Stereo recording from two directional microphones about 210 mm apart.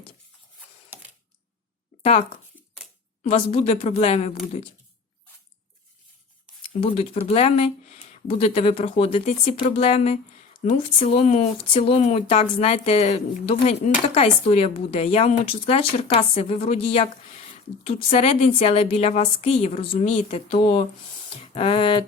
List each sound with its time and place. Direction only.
3.2 s a woman's voice: 30° left (ahead or behind)
6.7 s speech: 30° left (ahead or behind)
21.2 s a sound: 25° left (ahead or behind)